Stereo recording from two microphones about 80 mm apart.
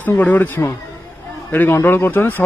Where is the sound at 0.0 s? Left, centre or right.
Left.